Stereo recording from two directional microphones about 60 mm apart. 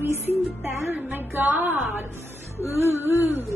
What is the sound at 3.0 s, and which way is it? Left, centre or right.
Speech, right.